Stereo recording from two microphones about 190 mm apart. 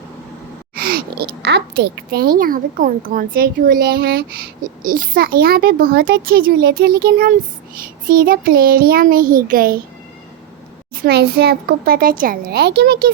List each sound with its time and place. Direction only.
0.8 s a child's voice: 50° right (ahead or behind)
10.9 s a child's voice: 55° right (ahead or behind)